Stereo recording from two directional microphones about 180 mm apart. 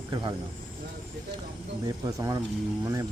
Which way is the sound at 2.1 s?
20° right (ahead or behind).